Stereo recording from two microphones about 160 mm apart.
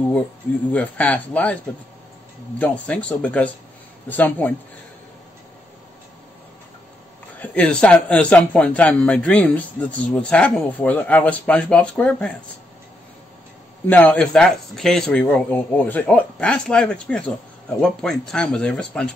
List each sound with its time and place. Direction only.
0.7 s a man's voice: 10° left (ahead or behind)
2.6 s a man's voice: 10° left (ahead or behind)
7.3 s a man's voice: 10° left (ahead or behind)
13.8 s a man's voice: 10° left (ahead or behind)